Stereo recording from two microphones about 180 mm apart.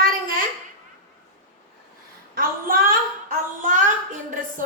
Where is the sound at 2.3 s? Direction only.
55° right (ahead or behind).